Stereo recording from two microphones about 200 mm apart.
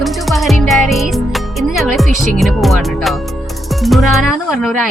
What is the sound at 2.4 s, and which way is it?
Music, centre (ahead or behind).